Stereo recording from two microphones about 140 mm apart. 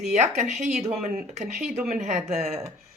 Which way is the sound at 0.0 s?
55° right (ahead or behind).